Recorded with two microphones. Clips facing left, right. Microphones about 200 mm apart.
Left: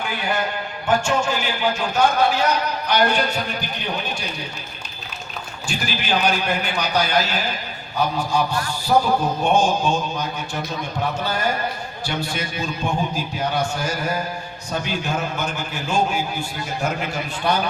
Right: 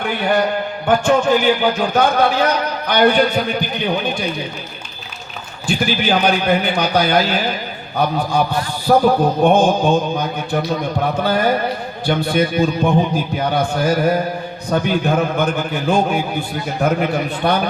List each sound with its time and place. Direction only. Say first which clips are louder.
0.0 s a man's voice: right 7 dB; 60° right (ahead or behind)
5.6 s a man's voice: right 9 dB; 55° right (ahead or behind)